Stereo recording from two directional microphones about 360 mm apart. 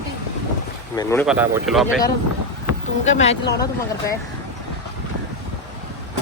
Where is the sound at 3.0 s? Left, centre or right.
Centre.